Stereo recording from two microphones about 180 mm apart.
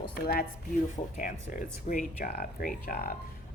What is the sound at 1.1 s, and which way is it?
A woman's voice, 45° left (ahead or behind).